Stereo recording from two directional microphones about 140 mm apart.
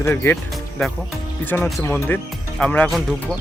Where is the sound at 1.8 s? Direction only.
15° left (ahead or behind).